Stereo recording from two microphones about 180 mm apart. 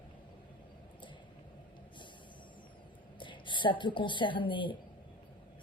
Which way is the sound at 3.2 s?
25° left (ahead or behind).